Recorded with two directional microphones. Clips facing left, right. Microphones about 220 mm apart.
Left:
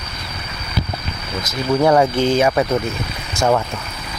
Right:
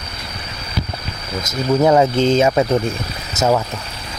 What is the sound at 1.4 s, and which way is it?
Speech, 20° right (ahead or behind).